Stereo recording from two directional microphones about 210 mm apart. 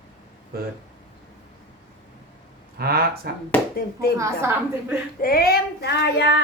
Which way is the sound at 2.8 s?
45° right (ahead or behind).